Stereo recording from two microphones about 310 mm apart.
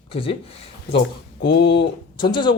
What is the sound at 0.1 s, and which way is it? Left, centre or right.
Speech, centre.